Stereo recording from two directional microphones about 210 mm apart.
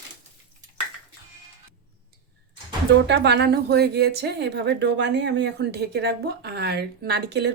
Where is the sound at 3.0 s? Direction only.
55° right (ahead or behind).